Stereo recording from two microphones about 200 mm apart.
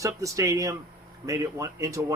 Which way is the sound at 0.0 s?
15° right (ahead or behind).